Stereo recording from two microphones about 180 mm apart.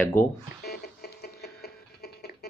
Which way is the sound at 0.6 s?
60° left (ahead or behind).